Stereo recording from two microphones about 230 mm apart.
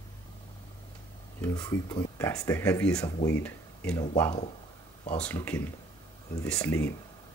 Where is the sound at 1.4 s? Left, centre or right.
Centre.